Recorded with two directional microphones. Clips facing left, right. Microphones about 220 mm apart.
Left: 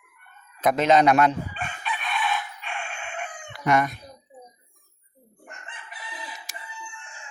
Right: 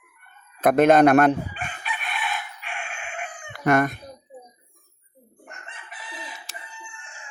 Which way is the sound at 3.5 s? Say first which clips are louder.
Right 3 dB; 50° right (ahead or behind).